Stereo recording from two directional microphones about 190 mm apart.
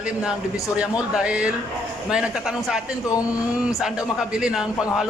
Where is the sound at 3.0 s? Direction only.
20° left (ahead or behind).